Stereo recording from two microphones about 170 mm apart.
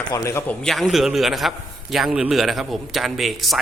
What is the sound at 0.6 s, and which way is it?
A man's voice, centre (ahead or behind).